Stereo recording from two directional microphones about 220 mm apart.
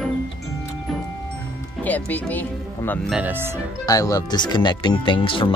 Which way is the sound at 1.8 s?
5° left (ahead or behind).